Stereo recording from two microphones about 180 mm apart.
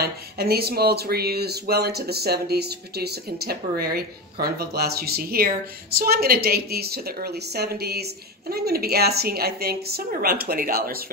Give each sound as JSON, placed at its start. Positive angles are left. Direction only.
{"t": 0.0, "sound": "speech", "side_deg": -60}